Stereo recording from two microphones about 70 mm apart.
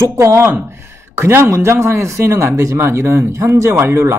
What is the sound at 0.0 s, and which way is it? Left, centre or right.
Speech, right.